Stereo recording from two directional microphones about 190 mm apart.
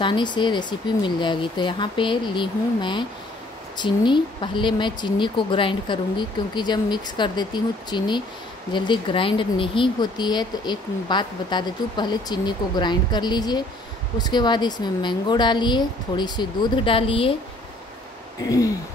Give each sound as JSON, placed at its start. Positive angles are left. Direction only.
{"t": 0.0, "sound": "speech", "side_deg": 25}
{"t": 18.4, "sound": "speech", "side_deg": 20}